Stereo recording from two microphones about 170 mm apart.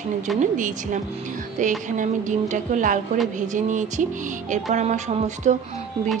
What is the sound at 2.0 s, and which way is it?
A woman's voice, 50° right (ahead or behind).